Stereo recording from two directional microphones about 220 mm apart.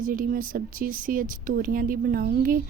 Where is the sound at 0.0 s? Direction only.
40° right (ahead or behind).